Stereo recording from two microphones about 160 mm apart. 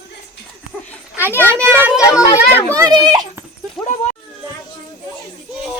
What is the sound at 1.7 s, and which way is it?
Speech, 10° right (ahead or behind).